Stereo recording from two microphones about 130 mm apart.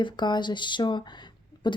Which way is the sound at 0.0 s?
35° left (ahead or behind).